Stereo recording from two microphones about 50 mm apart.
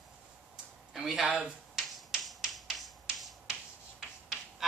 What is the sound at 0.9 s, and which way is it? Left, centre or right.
Finger snapping, centre.